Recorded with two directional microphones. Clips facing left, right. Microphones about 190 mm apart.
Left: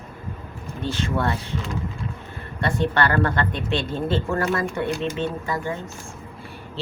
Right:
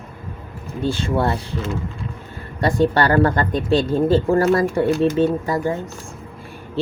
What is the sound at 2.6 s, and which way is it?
Speech, 35° right (ahead or behind).